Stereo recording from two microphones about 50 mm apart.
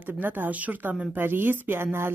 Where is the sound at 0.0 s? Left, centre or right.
Right.